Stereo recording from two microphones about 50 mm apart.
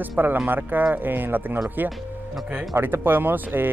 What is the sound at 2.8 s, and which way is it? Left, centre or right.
Speech, right.